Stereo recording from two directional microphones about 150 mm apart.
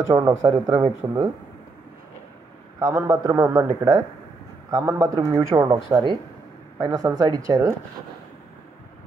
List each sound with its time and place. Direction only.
0.1 s a man's voice: 20° right (ahead or behind)
0.5 s a man's voice: 30° right (ahead or behind)
2.8 s a man's voice: 20° right (ahead or behind)
4.6 s a man's voice: 25° right (ahead or behind)